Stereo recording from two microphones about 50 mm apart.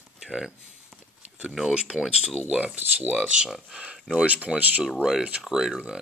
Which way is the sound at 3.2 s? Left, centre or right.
Centre.